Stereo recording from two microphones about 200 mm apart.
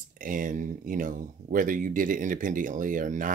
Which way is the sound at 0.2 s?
40° right (ahead or behind).